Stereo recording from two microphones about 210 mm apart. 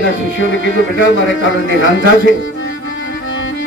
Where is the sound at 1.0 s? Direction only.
65° left (ahead or behind).